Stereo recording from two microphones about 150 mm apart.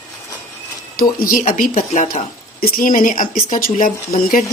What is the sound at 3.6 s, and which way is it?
Speech, 45° left (ahead or behind).